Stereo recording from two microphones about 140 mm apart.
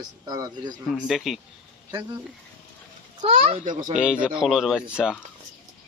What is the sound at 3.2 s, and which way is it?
Speech, 45° right (ahead or behind).